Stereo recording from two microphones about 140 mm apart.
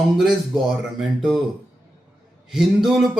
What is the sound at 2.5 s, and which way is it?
Speech, 5° right (ahead or behind).